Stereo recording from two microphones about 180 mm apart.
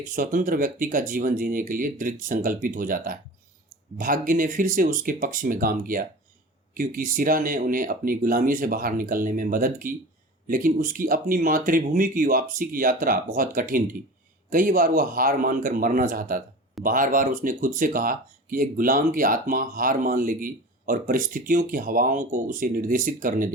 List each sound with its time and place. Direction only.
0.0 s speech: 50° right (ahead or behind)